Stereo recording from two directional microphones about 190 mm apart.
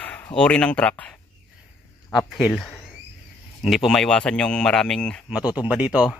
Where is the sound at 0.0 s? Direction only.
5° left (ahead or behind).